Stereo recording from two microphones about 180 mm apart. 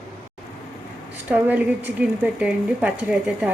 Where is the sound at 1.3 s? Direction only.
10° right (ahead or behind).